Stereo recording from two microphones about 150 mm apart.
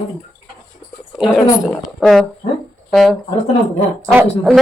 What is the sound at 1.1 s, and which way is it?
Speech, centre (ahead or behind).